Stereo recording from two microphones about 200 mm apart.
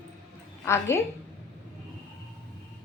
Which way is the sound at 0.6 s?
15° left (ahead or behind).